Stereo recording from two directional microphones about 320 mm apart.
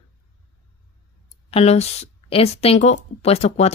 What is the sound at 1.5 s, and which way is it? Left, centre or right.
Speech, centre.